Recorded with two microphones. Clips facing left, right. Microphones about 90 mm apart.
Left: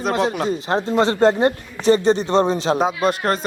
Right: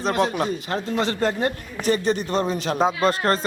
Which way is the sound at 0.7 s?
35° left (ahead or behind).